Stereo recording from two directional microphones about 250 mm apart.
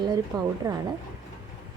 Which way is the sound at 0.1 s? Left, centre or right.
Centre.